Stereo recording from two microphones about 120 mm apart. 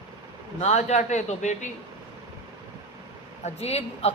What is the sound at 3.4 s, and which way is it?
Speech, 60° left (ahead or behind).